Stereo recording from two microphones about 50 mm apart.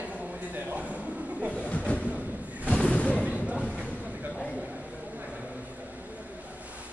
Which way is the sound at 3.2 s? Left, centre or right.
Right.